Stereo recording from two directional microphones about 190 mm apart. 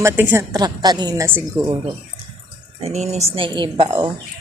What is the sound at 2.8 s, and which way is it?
Speech, 35° right (ahead or behind).